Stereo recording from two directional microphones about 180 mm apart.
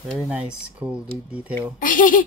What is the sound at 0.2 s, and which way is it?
Speech, 5° right (ahead or behind).